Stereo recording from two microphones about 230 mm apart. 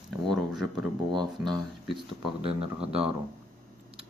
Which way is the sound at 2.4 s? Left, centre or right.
Right.